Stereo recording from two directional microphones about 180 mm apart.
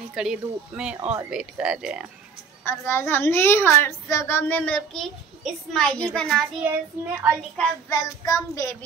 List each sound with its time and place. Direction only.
0.1 s speech: 5° right (ahead or behind)
2.6 s a woman's voice: 15° left (ahead or behind)
7.9 s child singing: 20° left (ahead or behind)